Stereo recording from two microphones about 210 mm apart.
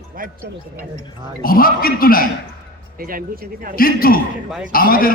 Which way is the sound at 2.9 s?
45° right (ahead or behind).